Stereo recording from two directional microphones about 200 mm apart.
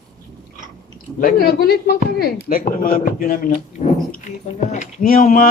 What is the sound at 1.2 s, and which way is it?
Speech, 45° left (ahead or behind).